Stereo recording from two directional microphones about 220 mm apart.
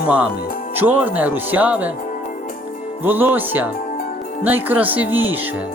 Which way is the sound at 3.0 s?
10° right (ahead or behind).